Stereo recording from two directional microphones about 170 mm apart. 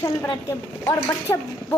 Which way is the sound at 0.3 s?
20° left (ahead or behind).